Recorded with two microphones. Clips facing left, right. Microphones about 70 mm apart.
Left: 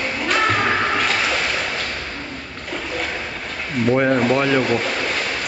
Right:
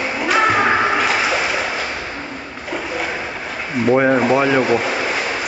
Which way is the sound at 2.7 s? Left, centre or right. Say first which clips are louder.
Right 3 dB; centre.